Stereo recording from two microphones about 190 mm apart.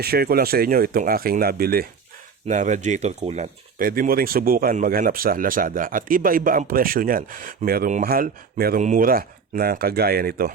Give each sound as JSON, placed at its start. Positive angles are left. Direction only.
{"t": 0.0, "sound": "speech", "side_deg": -55}
{"t": 2.5, "sound": "speech", "side_deg": -40}